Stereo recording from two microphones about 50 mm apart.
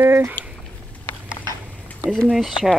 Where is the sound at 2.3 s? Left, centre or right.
Centre.